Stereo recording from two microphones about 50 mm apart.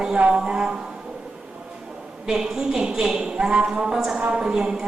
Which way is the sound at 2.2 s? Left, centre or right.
Centre.